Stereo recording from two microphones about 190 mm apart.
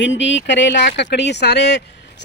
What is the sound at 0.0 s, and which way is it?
Speech, 70° left (ahead or behind).